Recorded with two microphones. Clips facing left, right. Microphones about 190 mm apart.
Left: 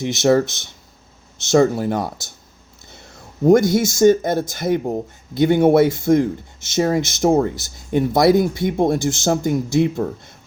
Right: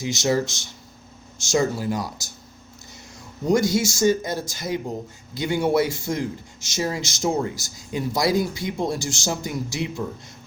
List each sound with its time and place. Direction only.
0.0 s speech: 60° left (ahead or behind)
3.4 s speech: 55° left (ahead or behind)